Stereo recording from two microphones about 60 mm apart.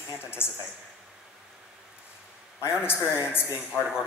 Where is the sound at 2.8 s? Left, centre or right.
Left.